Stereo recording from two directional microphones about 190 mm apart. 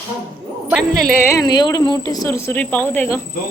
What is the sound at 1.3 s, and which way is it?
Speech, 20° left (ahead or behind).